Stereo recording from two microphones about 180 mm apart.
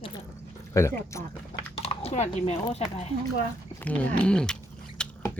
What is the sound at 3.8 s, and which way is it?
Speech, 10° left (ahead or behind).